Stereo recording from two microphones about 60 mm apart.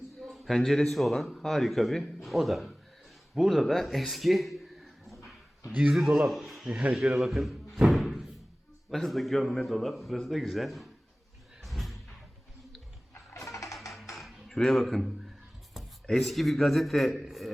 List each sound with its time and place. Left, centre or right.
0.2 s a man's voice: centre
6.7 s a man's voice: centre
7.9 s knock: centre
8.9 s speech: centre
11.6 s a sound: centre
13.3 s music: left
13.9 s coin: centre
14.5 s speech: centre